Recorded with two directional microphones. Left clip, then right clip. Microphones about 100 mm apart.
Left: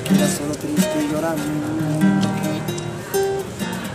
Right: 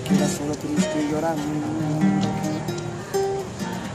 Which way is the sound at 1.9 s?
5° right (ahead or behind).